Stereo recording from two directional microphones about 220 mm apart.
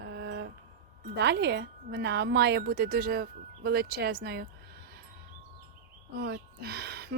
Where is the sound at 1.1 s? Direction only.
50° right (ahead or behind).